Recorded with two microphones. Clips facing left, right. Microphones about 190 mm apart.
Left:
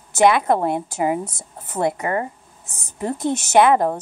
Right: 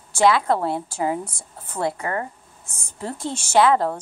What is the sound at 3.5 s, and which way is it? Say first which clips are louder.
Speech: left 2 dB; 15° left (ahead or behind).